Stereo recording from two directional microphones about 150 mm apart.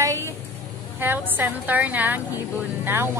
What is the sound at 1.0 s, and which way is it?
A woman's voice, 10° right (ahead or behind).